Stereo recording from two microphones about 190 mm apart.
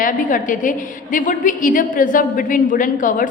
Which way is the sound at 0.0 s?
45° left (ahead or behind).